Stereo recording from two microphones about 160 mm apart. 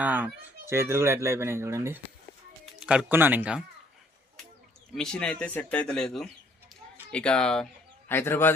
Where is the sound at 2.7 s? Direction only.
5° right (ahead or behind).